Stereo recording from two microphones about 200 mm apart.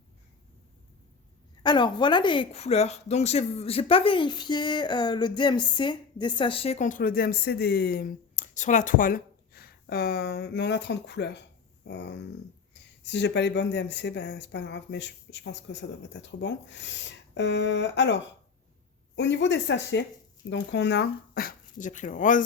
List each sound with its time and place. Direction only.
1.6 s speech: 20° left (ahead or behind); by 22.4 s 40° left (ahead or behind)